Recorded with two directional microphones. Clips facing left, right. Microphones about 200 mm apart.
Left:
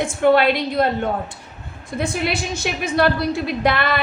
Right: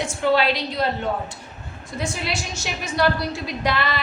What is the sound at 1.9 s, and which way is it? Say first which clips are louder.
A woman's voice: left 5 dB; 55° left (ahead or behind).